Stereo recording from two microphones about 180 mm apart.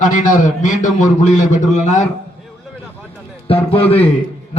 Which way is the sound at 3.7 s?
30° left (ahead or behind).